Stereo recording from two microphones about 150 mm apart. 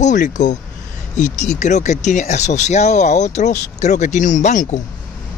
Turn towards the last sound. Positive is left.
turn(degrees=50)  # may be behind; listen again after turning